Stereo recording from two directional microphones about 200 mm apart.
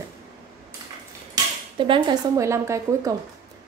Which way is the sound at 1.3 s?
25° right (ahead or behind).